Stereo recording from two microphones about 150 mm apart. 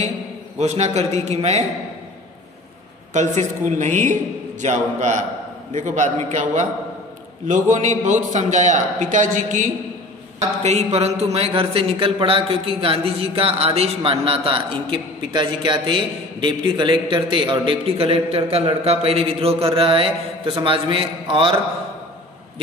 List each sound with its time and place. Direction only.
0.6 s a man's voice: 50° right (ahead or behind)
3.1 s a man's voice: 55° right (ahead or behind)
10.6 s a man's voice: 50° right (ahead or behind)